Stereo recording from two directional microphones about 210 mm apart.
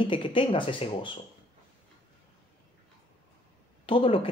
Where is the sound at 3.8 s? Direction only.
25° left (ahead or behind).